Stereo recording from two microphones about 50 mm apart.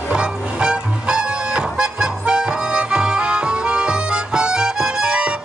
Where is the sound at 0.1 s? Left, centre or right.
Right.